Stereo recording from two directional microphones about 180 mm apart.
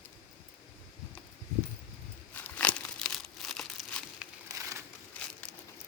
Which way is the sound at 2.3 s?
10° left (ahead or behind).